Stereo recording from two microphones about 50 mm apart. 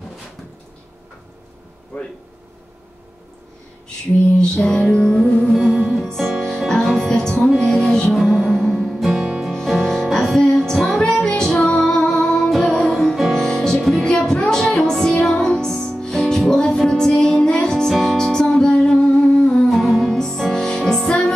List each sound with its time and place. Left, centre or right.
4.4 s music: centre
4.9 s music: centre
8.1 s music: centre
9.5 s music: centre
10.4 s music: centre
11.6 s music: centre
12.2 s music: centre
12.4 s music: centre
12.7 s music: centre
13.0 s music: centre
13.7 s music: centre
14.0 s music: centre
19.7 s music: centre